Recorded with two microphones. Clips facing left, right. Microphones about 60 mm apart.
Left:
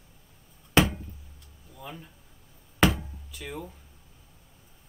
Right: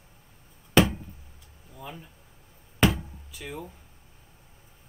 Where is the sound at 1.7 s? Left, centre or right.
Centre.